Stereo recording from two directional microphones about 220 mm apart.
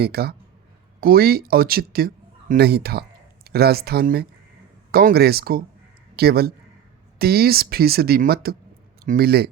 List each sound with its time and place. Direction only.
0.0 s speech: 45° right (ahead or behind)